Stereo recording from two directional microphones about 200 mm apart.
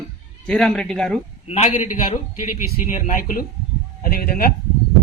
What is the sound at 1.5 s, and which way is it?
A man's voice, 35° left (ahead or behind).